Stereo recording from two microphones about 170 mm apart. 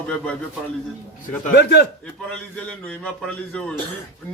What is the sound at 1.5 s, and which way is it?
Speech, 80° left.